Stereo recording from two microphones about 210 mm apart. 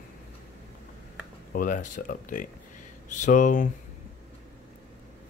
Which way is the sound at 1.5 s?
40° left (ahead or behind).